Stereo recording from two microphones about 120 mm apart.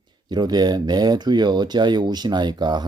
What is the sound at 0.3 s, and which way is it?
Speech, 35° right (ahead or behind).